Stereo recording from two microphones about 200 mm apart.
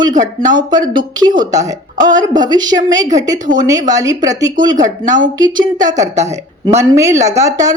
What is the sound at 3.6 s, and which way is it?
Speech, 20° right (ahead or behind).